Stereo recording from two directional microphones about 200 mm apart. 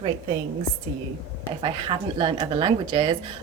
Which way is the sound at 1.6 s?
25° right (ahead or behind).